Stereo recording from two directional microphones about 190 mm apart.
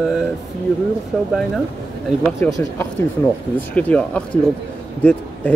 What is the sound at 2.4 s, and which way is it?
Speech, 15° left (ahead or behind).